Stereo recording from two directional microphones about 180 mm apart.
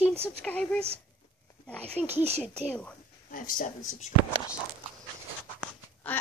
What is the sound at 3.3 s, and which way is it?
Speech, 50° left (ahead or behind).